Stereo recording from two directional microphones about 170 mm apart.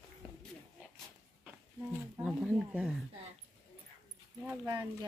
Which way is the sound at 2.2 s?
5° right (ahead or behind).